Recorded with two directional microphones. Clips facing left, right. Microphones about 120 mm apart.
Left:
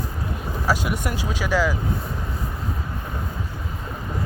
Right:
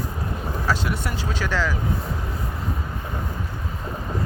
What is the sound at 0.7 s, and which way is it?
Speech, 10° left (ahead or behind).